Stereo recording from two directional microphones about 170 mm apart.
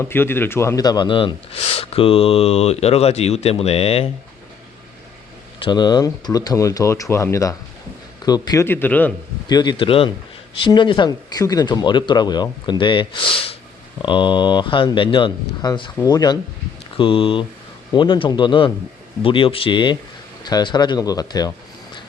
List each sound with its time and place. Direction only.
0.0 s speech: 15° left (ahead or behind); by 4.1 s 35° left (ahead or behind)
5.6 s a man's voice: 25° left (ahead or behind); by 9.1 s 10° left (ahead or behind)
9.5 s speech: 25° left (ahead or behind)